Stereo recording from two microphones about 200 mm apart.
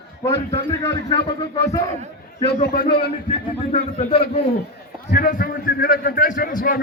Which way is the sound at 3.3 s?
30° left (ahead or behind).